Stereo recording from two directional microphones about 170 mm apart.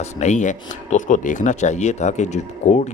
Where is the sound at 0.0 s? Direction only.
45° left (ahead or behind).